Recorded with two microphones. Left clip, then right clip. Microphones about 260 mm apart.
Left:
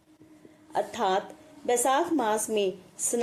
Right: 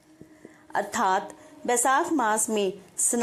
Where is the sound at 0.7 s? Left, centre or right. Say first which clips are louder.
Right 2 dB; centre.